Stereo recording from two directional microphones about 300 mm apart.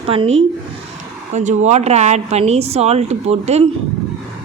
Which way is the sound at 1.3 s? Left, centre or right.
Right.